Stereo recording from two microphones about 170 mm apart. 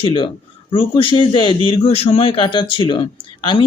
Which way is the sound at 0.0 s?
30° left (ahead or behind).